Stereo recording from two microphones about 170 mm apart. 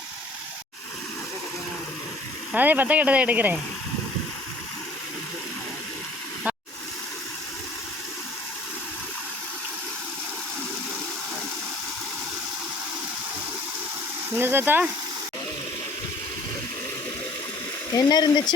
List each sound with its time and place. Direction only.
2.5 s speech: 10° right (ahead or behind)
14.3 s a sound: 15° right (ahead or behind)
17.9 s speech: 20° left (ahead or behind)